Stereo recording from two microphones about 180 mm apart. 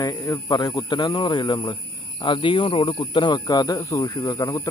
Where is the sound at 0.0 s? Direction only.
20° left (ahead or behind).